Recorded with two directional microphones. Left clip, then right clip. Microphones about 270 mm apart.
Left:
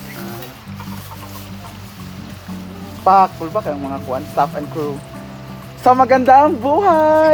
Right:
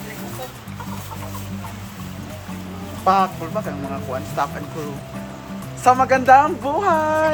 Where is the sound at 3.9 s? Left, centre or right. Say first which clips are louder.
Left 4 dB; left.